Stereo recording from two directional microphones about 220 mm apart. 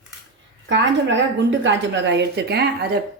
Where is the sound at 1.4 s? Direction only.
55° right (ahead or behind).